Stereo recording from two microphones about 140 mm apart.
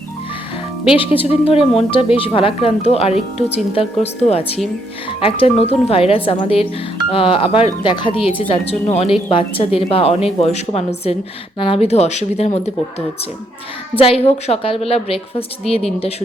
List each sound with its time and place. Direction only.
0.9 s speech: 40° left (ahead or behind)
13.9 s speech: 40° left (ahead or behind)